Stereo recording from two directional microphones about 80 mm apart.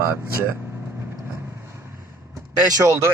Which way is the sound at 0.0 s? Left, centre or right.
Right.